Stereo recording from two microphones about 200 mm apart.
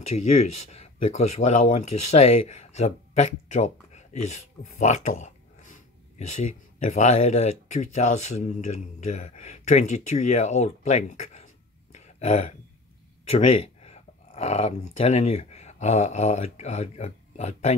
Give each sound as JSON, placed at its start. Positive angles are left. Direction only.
{"t": 0.1, "sound": "speech", "side_deg": 35}